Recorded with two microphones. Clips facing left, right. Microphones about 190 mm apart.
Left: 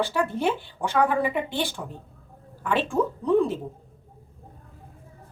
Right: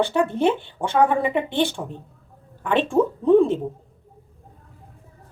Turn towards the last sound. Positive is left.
turn(degrees=-25)  # may be behind; listen again after turning